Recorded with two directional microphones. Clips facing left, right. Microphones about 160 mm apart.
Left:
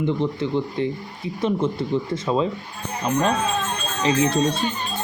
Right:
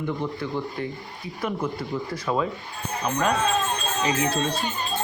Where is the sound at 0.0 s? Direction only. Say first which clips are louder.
Left 6 dB; 20° left (ahead or behind).